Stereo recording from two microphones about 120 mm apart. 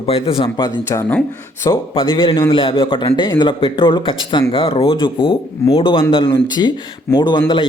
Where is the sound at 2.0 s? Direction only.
45° left (ahead or behind).